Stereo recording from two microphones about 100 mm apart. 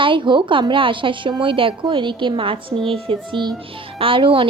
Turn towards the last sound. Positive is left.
turn(degrees=-60)  # may be behind; listen again after turning